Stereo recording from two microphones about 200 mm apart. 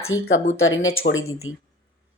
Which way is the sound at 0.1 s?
75° left (ahead or behind).